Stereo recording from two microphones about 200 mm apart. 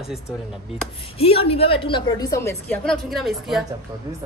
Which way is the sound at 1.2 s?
30° left (ahead or behind).